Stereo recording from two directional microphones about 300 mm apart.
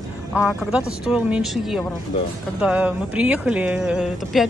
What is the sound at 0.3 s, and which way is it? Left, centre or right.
Speech, centre.